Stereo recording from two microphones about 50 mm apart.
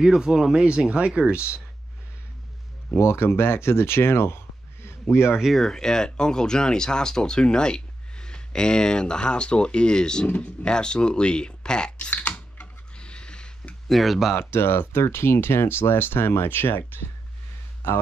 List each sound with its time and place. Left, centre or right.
0.0 s speech: centre
3.0 s speech: left
5.6 s speech: centre
10.2 s speech: left
12.1 s typing: left
12.9 s a sound: centre
13.8 s speech: centre
14.3 s speech: left